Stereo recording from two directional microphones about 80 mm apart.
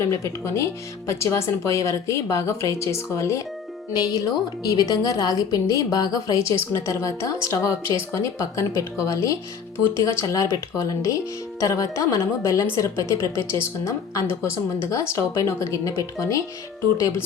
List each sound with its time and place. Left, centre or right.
0.0 s speech: left
3.9 s a woman's voice: left
6.7 s speech: left